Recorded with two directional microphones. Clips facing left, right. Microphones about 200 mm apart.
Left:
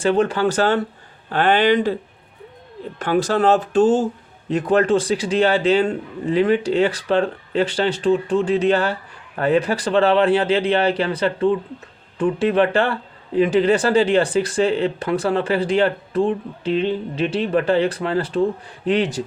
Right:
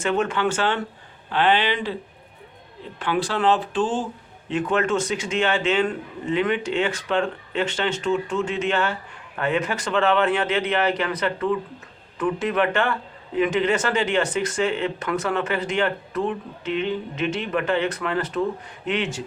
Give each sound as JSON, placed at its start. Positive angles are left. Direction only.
{"t": 0.0, "sound": "speech", "side_deg": 35}
{"t": 3.0, "sound": "speech", "side_deg": 45}